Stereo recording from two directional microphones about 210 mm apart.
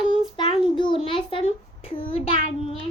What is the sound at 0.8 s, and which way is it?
A child's voice, 25° left (ahead or behind).